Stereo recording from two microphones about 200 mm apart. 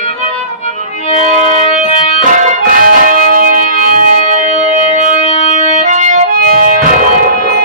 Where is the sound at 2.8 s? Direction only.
40° right (ahead or behind).